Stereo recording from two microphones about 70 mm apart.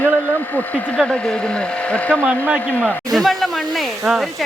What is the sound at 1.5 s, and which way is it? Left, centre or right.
Speech, centre.